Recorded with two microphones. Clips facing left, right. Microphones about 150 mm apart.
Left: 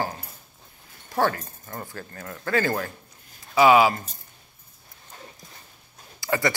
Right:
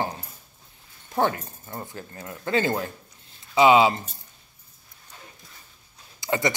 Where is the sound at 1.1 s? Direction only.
20° right (ahead or behind).